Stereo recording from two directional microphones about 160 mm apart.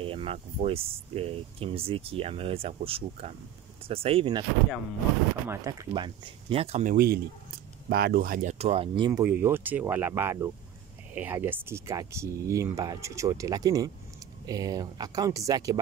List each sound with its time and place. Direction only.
0.0 s speech: 35° right (ahead or behind)
5.5 s speech: 20° right (ahead or behind); by 7.0 s 45° right (ahead or behind)
7.0 s speech: 75° right (ahead or behind); by 9.2 s 30° right (ahead or behind)
9.2 s speech: 15° right (ahead or behind)